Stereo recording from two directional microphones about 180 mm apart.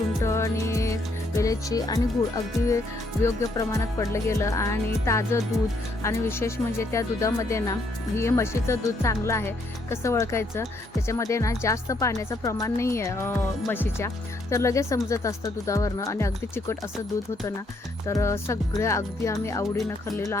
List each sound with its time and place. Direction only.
0.2 s music: 15° left (ahead or behind)
1.4 s speech: 20° left (ahead or behind)
18.0 s speech: 15° left (ahead or behind)